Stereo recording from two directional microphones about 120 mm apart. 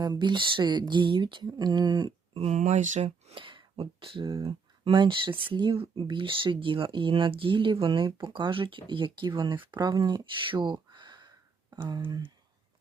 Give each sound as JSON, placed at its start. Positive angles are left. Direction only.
{"t": 0.0, "sound": "speech", "side_deg": -35}
{"t": 2.3, "sound": "speech", "side_deg": -55}
{"t": 2.6, "sound": "speech", "side_deg": -80}
{"t": 3.3, "sound": "speech", "side_deg": -45}
{"t": 10.3, "sound": "a sound", "side_deg": -45}
{"t": 11.9, "sound": "speech", "side_deg": -35}